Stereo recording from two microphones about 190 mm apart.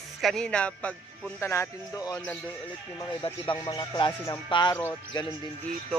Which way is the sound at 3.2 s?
25° left (ahead or behind).